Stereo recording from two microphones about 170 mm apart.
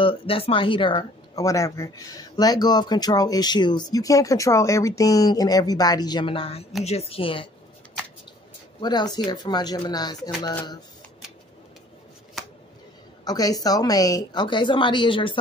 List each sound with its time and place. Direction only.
0.0 s speech: 35° left (ahead or behind)
8.8 s speech: 25° left (ahead or behind)
13.2 s speech: 20° left (ahead or behind)